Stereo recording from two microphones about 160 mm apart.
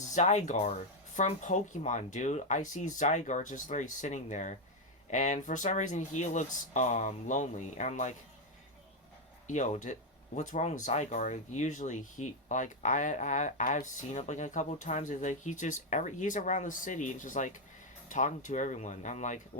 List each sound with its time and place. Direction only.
0.1 s speech: 45° left (ahead or behind)
9.5 s speech: 50° left (ahead or behind)